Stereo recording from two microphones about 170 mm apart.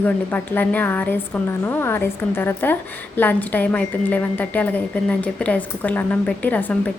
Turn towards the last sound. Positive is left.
turn(degrees=10)  # may be behind; listen again after turning